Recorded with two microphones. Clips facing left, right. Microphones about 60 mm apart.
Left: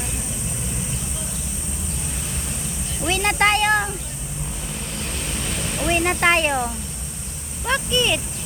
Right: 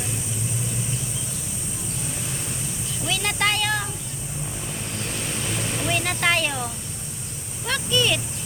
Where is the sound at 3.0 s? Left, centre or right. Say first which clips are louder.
Left 5 dB; left.